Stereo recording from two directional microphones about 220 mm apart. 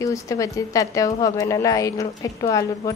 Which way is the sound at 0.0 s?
15° left (ahead or behind).